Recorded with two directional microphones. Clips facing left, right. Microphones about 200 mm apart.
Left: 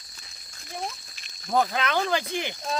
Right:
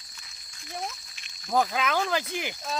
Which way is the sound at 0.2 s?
35° left (ahead or behind).